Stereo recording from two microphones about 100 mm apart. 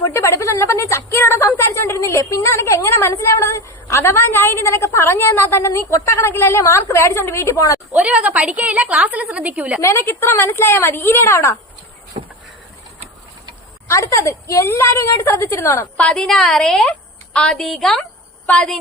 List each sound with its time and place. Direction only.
0.0 s a woman's voice: 25° left (ahead or behind)
7.9 s a woman's voice: 15° right (ahead or behind)
9.8 s a woman's voice: 25° left (ahead or behind)
12.1 s a sound: 65° right (ahead or behind)
13.8 s a woman's voice: 30° left (ahead or behind)
16.0 s a woman's voice: 10° left (ahead or behind)